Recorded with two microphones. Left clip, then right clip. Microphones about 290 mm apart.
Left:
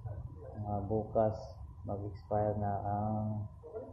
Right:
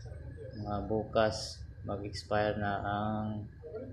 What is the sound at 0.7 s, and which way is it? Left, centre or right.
Speech, right.